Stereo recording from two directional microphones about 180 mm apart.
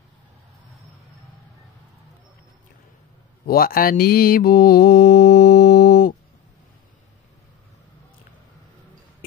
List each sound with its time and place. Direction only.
3.4 s mantra: 55° left (ahead or behind)